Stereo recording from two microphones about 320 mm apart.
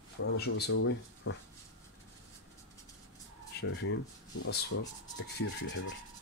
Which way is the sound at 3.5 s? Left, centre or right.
Left.